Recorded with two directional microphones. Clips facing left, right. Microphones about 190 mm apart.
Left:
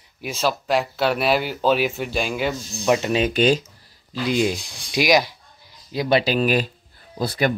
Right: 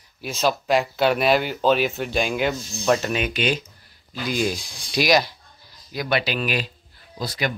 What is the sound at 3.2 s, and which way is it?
Speech, 40° left (ahead or behind).